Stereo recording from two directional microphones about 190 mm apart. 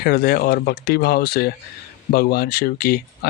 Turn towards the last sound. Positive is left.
turn(degrees=50)  # may be behind; listen again after turning